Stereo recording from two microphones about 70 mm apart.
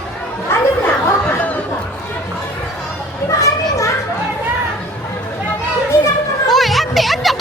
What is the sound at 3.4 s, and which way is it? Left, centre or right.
Children playing, left.